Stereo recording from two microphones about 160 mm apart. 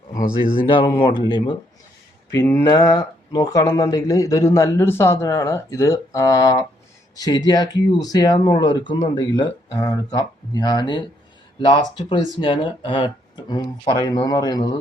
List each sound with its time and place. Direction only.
0.6 s speech: 30° left (ahead or behind)
2.3 s speech: 15° left (ahead or behind)